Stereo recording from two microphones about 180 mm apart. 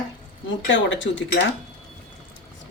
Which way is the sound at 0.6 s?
90° left.